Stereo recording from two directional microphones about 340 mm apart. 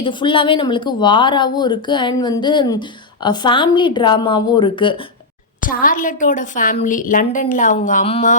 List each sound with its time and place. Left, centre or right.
0.0 s a woman's voice: centre